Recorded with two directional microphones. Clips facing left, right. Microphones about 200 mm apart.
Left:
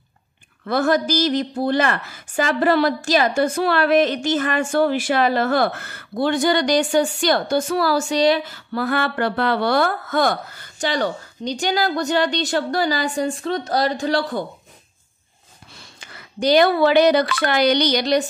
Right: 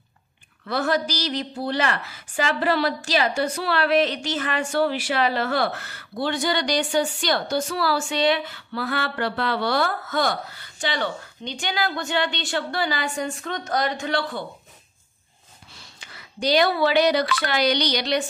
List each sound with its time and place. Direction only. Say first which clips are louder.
0.7 s a woman's voice: left 5 dB; 45° left (ahead or behind)
16.0 s a woman's voice: left 5 dB; 50° left (ahead or behind)